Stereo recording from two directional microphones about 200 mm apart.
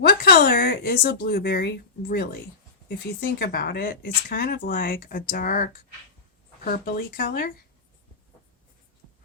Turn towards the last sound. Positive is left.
turn(degrees=45)  # may be behind; listen again after turning